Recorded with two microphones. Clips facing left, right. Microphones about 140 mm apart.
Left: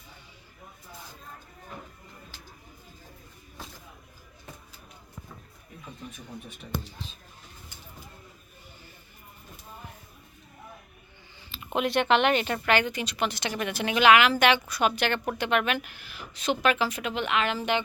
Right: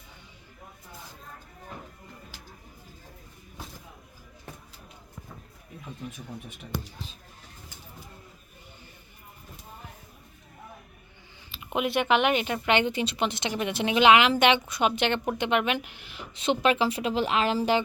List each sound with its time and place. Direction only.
11.5 s speech: 5° right (ahead or behind)
12.6 s a woman's voice: 25° right (ahead or behind)